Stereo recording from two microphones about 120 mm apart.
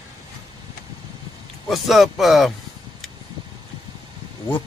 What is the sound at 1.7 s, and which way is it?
Speech, centre (ahead or behind).